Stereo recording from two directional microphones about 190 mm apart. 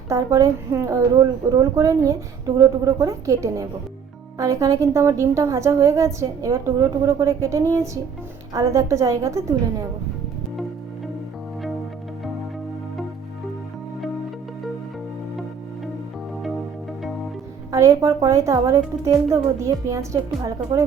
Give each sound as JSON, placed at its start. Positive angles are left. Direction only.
{"t": 0.1, "sound": "a woman's voice", "side_deg": -15}
{"t": 17.7, "sound": "a woman's voice", "side_deg": -15}